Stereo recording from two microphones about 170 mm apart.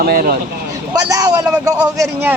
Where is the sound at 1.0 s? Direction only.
20° right (ahead or behind).